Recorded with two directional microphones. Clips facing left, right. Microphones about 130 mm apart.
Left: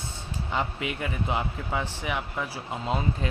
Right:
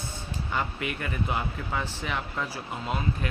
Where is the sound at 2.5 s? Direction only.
25° left (ahead or behind).